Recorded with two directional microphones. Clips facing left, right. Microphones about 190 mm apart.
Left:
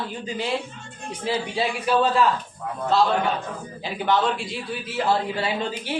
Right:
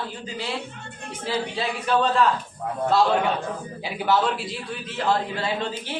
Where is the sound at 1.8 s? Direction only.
5° left (ahead or behind).